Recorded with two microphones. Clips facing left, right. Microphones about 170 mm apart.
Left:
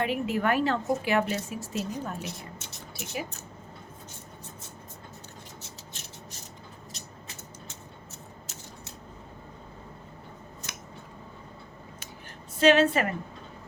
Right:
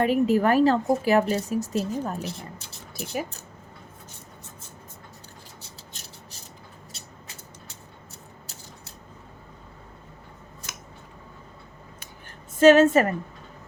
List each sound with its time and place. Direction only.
0.0 s a woman's voice: 40° right (ahead or behind)
12.5 s a woman's voice: 45° right (ahead or behind)